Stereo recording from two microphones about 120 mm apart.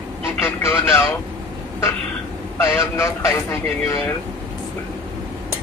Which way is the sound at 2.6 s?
20° left (ahead or behind).